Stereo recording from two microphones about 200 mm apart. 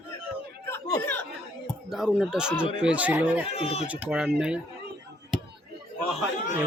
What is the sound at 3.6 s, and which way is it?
Speech, 30° left (ahead or behind).